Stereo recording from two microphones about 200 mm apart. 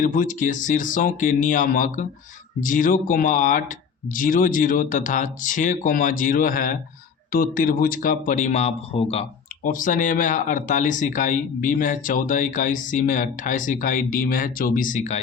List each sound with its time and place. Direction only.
0.0 s speech: 40° left (ahead or behind)
9.6 s speech: 40° left (ahead or behind)